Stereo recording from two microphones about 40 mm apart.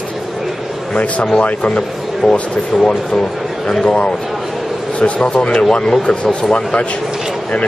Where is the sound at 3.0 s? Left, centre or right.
Centre.